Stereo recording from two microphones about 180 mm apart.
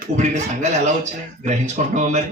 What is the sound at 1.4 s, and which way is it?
Speech, 40° right (ahead or behind).